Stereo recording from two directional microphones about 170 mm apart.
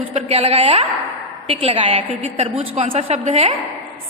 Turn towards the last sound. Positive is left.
turn(degrees=-40)  # may be behind; listen again after turning